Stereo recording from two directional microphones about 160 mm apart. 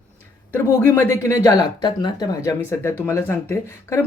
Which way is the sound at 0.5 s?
15° left (ahead or behind).